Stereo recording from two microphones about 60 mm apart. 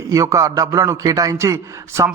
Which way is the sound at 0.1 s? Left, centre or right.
Right.